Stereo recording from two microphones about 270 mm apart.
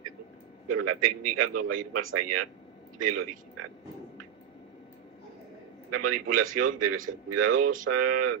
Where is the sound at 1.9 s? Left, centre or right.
Right.